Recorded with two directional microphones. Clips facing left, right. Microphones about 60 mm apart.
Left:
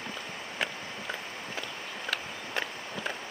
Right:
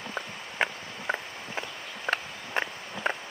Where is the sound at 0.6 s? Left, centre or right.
Right.